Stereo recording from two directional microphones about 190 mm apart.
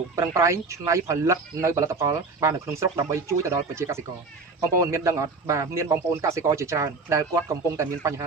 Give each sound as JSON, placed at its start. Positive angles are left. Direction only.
{"t": 0.2, "sound": "speech", "side_deg": -15}